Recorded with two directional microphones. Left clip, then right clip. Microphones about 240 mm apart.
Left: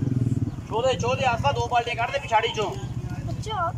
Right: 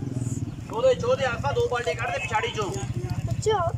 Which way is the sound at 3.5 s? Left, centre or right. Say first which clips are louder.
Right 7 dB; right.